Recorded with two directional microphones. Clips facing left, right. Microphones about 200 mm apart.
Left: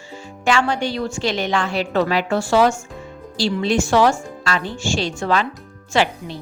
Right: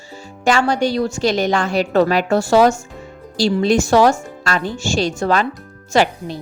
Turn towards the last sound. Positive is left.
turn(degrees=-40)  # may be behind; listen again after turning